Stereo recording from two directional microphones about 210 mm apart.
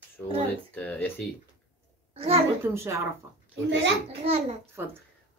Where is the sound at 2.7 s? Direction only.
15° right (ahead or behind).